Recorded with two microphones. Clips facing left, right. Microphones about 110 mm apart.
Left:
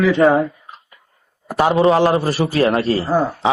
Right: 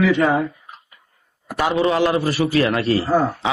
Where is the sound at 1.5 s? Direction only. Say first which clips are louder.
Left 5 dB; 35° left (ahead or behind).